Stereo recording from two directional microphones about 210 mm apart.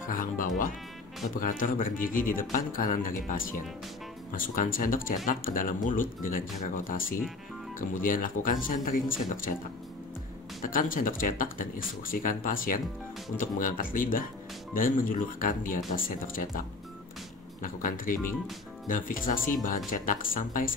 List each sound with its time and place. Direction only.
0.0 s speech: 40° left (ahead or behind)
10.6 s speech: 40° left (ahead or behind)
17.6 s speech: 40° left (ahead or behind)